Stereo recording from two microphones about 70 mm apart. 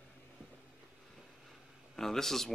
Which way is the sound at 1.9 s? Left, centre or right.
Centre.